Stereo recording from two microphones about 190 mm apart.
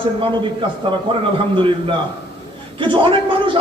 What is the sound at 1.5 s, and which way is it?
A man's voice, 25° right (ahead or behind).